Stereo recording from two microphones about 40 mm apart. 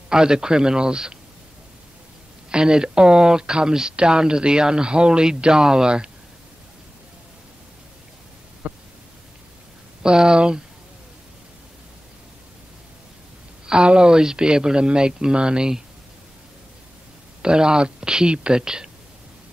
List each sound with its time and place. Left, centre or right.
0.1 s speech: centre
2.5 s speech: centre
8.6 s static: right
10.0 s speech: centre
13.7 s speech: right
17.4 s speech: right